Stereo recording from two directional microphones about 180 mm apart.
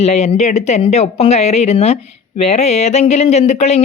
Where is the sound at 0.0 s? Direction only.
35° left (ahead or behind).